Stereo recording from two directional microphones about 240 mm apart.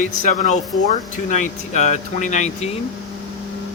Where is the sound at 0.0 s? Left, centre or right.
Left.